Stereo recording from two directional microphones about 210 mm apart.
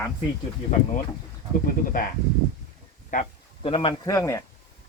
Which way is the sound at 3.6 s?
25° left (ahead or behind).